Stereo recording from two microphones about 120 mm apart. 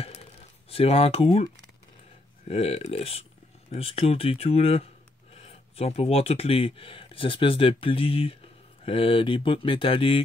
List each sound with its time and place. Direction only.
0.7 s speech: 55° left (ahead or behind)
2.4 s speech: 60° left (ahead or behind)